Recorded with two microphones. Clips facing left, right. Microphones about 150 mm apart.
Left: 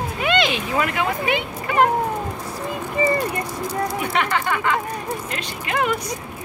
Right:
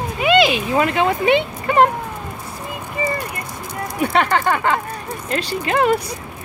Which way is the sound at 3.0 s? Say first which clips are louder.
Left 3 dB; 35° left (ahead or behind).